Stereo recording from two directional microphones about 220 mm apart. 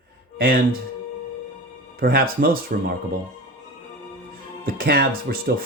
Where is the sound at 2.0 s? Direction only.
40° right (ahead or behind).